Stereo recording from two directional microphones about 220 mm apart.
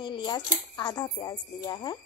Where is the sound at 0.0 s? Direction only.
20° left (ahead or behind).